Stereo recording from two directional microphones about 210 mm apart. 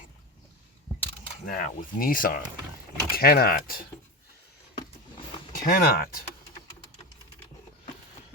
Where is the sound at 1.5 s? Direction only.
40° left (ahead or behind).